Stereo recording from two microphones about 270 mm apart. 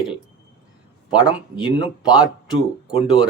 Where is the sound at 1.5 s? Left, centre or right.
Centre.